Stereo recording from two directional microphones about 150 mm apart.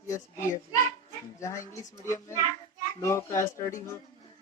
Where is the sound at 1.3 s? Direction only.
20° left (ahead or behind).